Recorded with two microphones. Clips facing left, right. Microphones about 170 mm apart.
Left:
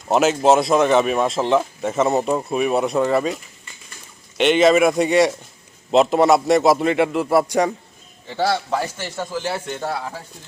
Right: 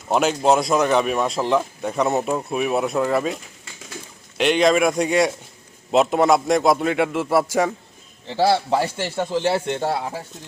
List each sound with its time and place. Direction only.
0.1 s speech: centre (ahead or behind)
8.4 s speech: 30° right (ahead or behind)